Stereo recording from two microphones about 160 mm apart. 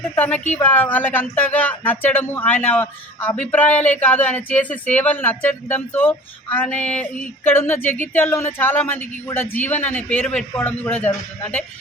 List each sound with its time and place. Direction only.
0.2 s speech: 10° left (ahead or behind)